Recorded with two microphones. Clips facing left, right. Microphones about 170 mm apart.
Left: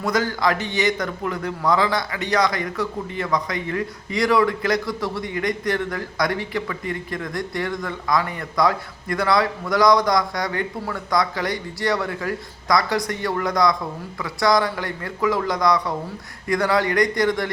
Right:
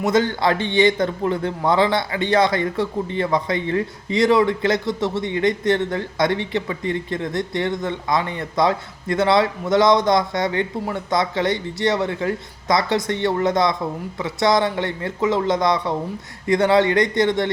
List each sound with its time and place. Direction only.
0.0 s a man's voice: 25° right (ahead or behind)